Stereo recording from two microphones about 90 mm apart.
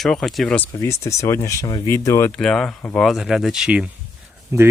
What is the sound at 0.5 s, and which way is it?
Speech, 20° left (ahead or behind).